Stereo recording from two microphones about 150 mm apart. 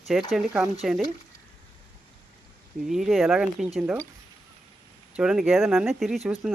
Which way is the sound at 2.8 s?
Centre (ahead or behind).